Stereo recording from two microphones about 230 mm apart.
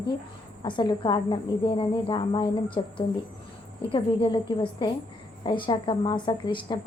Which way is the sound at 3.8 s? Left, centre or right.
Left.